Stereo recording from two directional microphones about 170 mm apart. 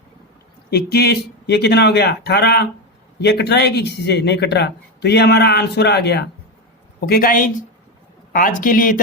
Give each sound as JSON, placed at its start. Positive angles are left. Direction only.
{"t": 0.7, "sound": "speech", "side_deg": 65}
{"t": 7.1, "sound": "speech", "side_deg": 60}